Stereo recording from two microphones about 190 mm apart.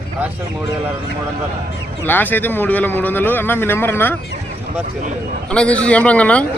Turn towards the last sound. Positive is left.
turn(degrees=5)  # may be behind; listen again after turning